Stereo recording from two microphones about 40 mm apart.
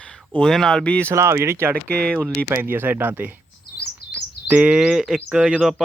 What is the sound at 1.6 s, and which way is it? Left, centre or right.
Speech, right.